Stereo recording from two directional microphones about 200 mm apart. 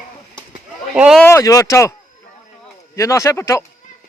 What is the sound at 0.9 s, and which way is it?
Speech, 5° right (ahead or behind).